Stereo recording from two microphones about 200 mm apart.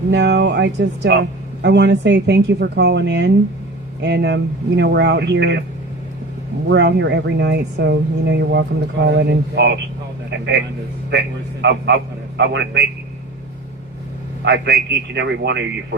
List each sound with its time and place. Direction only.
0.1 s speech: 60° right (ahead or behind)
6.7 s speech: 60° right (ahead or behind)
11.6 s speech: 60° right (ahead or behind)
14.4 s speech: 60° right (ahead or behind)